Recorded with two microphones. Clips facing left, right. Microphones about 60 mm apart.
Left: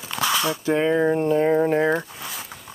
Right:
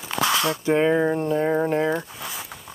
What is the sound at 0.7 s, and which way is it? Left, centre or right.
Speech, centre.